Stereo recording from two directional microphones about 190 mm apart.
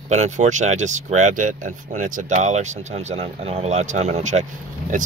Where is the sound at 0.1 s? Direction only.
40° right (ahead or behind).